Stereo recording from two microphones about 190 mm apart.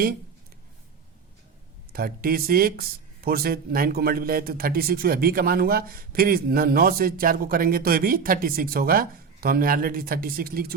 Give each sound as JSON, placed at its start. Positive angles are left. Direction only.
{"t": 1.9, "sound": "speech", "side_deg": -50}